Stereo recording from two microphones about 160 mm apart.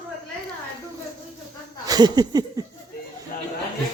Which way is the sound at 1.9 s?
25° right (ahead or behind).